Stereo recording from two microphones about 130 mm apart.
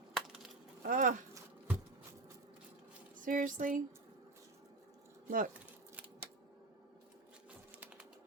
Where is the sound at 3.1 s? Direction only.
90° right.